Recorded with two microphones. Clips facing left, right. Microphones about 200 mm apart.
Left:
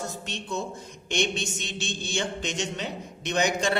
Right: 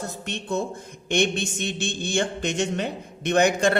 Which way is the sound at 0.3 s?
55° right (ahead or behind).